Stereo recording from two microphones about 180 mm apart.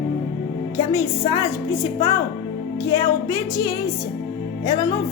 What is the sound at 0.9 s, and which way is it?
Music, 20° left (ahead or behind).